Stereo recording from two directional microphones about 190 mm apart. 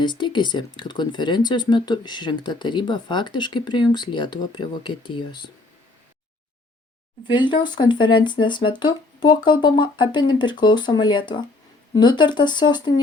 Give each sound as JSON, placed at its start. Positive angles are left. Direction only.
{"t": 0.0, "sound": "speech", "side_deg": 25}
{"t": 7.3, "sound": "speech", "side_deg": 25}